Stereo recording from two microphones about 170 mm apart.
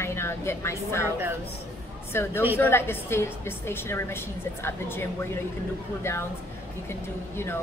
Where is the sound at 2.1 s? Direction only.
15° left (ahead or behind).